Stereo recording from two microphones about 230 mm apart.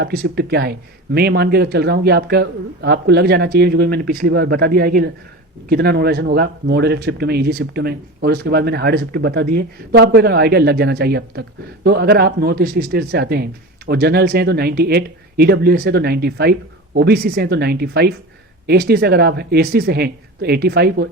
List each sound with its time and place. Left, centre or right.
0.0 s speech: right